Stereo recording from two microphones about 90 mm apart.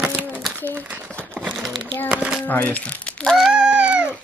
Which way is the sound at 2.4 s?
15° left (ahead or behind).